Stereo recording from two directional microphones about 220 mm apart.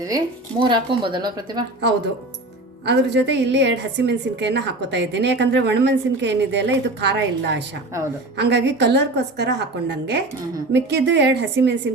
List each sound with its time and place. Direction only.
0.6 s speech: 20° right (ahead or behind)
2.8 s a woman's voice: 50° right (ahead or behind)